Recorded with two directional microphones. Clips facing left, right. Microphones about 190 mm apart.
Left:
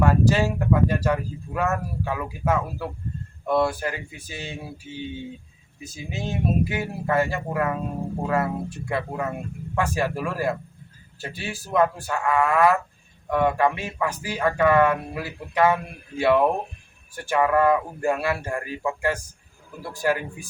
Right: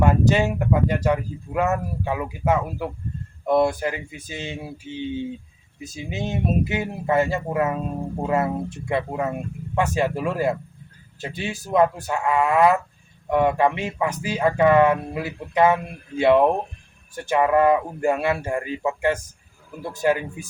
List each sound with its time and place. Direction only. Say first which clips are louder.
0.0 s speech: right 1 dB; 20° right (ahead or behind)